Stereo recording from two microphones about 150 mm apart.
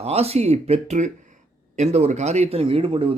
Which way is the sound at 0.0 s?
45° right (ahead or behind).